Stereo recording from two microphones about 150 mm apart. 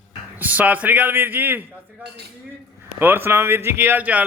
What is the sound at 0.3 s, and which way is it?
Speech, 10° right (ahead or behind).